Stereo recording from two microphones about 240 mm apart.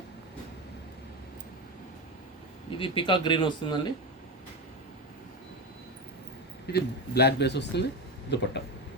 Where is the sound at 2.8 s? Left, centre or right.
Left.